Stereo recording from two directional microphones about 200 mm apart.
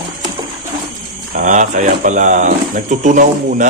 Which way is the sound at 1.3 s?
40° right (ahead or behind).